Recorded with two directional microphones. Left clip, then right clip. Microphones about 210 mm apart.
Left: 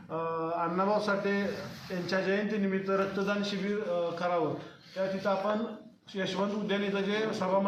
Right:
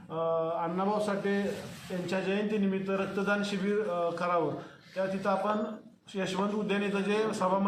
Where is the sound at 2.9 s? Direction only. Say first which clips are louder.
Left 1 dB; 15° right (ahead or behind).